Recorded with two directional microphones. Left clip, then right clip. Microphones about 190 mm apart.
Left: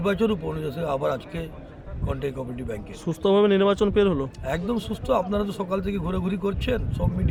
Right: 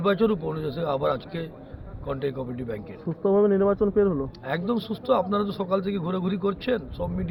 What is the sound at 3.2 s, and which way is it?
Speech, 40° left (ahead or behind).